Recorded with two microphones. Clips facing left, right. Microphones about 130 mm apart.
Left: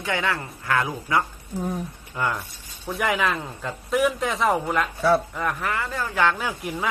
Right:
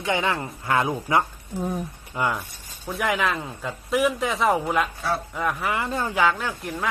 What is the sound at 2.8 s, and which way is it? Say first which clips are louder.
A man's voice: even; centre (ahead or behind).